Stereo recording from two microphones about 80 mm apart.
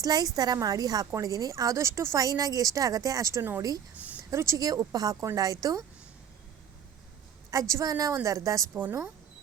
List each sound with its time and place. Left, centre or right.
0.0 s a woman's voice: right
2.2 s a woman's voice: right
7.5 s a woman's voice: right
8.7 s speech: right